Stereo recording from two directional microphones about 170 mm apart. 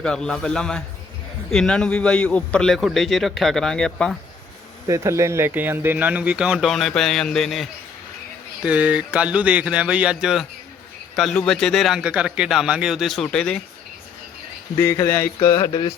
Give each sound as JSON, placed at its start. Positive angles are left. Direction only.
{"t": 0.0, "sound": "a man's voice", "side_deg": 5}
{"t": 4.9, "sound": "a man's voice", "side_deg": -20}
{"t": 14.8, "sound": "music", "side_deg": 15}